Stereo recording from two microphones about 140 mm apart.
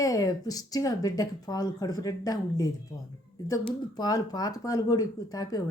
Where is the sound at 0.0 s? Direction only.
25° left (ahead or behind).